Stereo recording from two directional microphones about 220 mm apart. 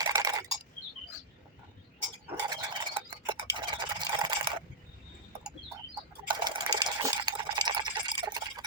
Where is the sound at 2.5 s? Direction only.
20° right (ahead or behind).